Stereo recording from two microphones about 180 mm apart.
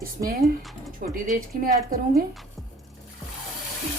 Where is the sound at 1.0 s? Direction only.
50° right (ahead or behind).